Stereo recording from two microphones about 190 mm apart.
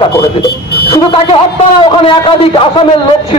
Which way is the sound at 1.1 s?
30° left (ahead or behind).